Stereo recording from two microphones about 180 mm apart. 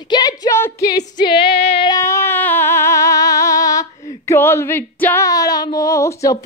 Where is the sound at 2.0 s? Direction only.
15° left (ahead or behind).